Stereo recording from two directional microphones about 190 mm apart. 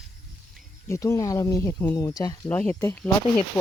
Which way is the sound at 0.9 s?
15° left (ahead or behind).